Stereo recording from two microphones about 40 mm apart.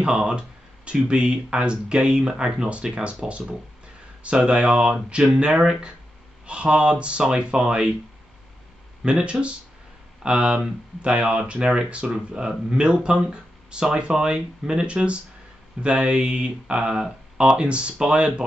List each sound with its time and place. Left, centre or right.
0.0 s speech: right
6.4 s speech: right
9.0 s speech: right